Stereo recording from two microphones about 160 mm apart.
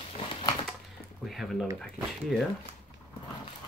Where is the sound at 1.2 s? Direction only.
Centre (ahead or behind).